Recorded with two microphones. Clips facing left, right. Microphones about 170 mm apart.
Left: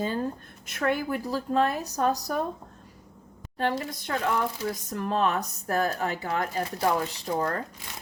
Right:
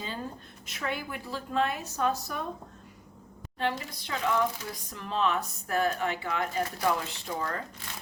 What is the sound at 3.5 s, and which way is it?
A woman's voice, 45° left (ahead or behind).